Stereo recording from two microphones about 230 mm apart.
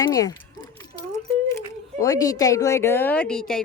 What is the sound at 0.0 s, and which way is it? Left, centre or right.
Speech, centre.